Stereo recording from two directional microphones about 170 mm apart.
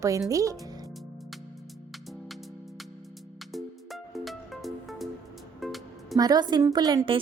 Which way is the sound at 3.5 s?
Centre (ahead or behind).